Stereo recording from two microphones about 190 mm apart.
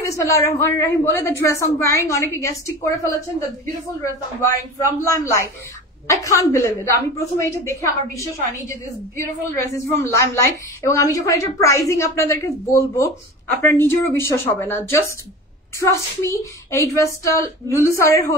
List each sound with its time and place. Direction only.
0.2 s a woman's voice: 15° left (ahead or behind)
4.4 s a woman's voice: 15° left (ahead or behind)